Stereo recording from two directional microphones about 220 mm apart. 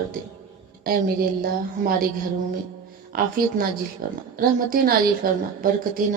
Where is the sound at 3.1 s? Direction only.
40° right (ahead or behind).